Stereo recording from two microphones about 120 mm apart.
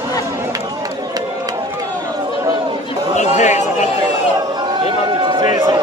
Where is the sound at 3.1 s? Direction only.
80° left.